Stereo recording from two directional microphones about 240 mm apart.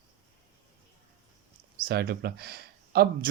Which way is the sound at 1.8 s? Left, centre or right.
Right.